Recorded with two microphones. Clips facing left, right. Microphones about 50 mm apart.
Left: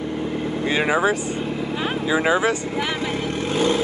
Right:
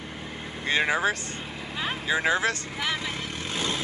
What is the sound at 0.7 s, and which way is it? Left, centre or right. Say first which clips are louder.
Speech: left 4 dB; centre.